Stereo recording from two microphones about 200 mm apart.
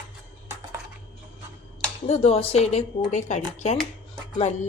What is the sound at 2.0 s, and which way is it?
A woman's voice, 30° left (ahead or behind).